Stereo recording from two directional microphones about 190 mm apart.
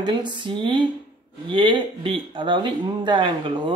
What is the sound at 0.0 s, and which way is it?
Speech, 25° right (ahead or behind).